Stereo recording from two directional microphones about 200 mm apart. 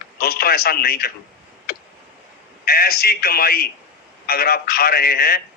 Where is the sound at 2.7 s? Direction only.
50° left (ahead or behind).